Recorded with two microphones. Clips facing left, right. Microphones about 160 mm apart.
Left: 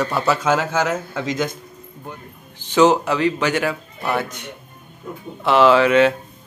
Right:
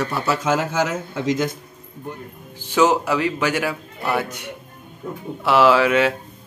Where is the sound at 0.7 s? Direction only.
60° left (ahead or behind).